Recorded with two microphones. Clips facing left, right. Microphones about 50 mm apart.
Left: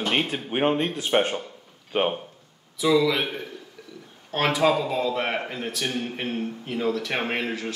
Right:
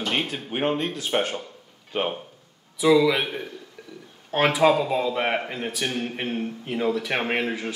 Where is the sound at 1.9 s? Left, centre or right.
Centre.